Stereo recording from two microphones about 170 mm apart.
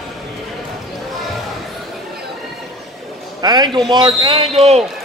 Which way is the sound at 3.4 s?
25° right (ahead or behind).